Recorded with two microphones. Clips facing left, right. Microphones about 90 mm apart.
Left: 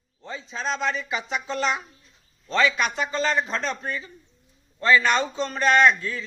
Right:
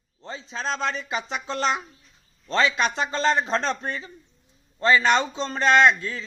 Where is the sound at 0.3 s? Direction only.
35° right (ahead or behind).